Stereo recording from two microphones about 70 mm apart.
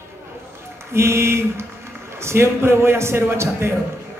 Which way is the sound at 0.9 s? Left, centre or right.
Right.